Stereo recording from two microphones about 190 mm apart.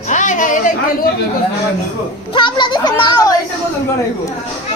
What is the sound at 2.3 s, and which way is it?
A child's voice, 25° left (ahead or behind).